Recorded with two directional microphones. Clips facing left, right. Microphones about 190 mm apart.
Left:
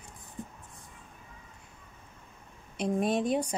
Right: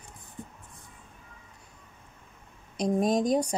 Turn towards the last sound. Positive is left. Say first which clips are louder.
# right 3 dB
turn(degrees=-40)  # may be behind; listen again after turning